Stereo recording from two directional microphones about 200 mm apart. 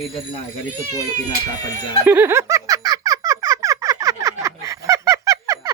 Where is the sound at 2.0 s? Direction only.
10° right (ahead or behind).